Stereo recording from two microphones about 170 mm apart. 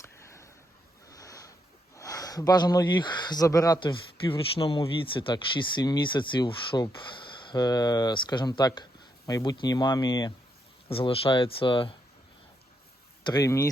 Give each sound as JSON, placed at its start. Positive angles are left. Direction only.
{"t": 1.1, "sound": "a sound", "side_deg": 20}
{"t": 2.0, "sound": "speech", "side_deg": 20}
{"t": 13.2, "sound": "speech", "side_deg": 20}